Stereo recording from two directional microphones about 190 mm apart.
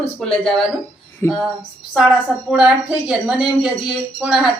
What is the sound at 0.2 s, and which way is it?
Speech, 5° left (ahead or behind).